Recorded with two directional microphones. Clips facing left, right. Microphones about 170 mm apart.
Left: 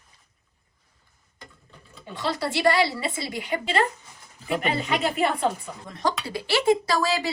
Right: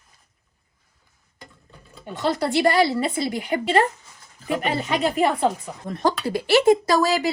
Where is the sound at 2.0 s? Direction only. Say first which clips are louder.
Right 5 dB; 50° right (ahead or behind).